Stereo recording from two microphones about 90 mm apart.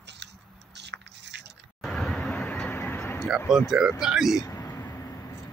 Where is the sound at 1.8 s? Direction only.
5° left (ahead or behind).